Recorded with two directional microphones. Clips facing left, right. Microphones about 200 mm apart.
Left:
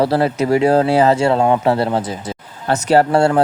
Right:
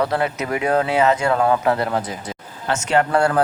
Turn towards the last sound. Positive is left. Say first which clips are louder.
# left 5 dB
turn(degrees=25)  # may be behind; listen again after turning